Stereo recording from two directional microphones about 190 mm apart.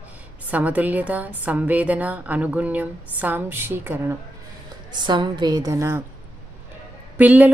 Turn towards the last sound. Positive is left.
turn(degrees=-10)  # may be behind; listen again after turning